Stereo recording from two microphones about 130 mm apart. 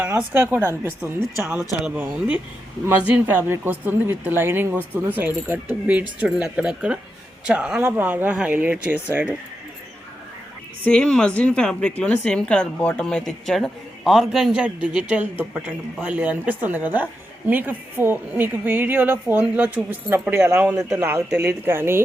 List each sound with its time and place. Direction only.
0.3 s a woman's voice: 15° right (ahead or behind)
2.1 s a woman's voice: 10° right (ahead or behind)
10.8 s a woman's voice: 5° left (ahead or behind); by 22.0 s 20° right (ahead or behind)